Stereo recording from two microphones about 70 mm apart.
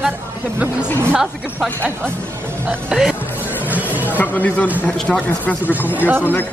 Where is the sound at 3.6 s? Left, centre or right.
Right.